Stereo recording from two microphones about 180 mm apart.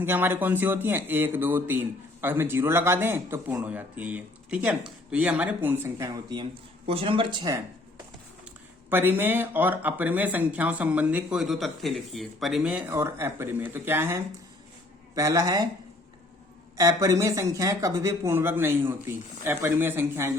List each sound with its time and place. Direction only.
0.0 s speech: 10° right (ahead or behind)
6.2 s speech: 25° right (ahead or behind)
8.9 s speech: 10° right (ahead or behind)
16.7 s speech: 20° right (ahead or behind)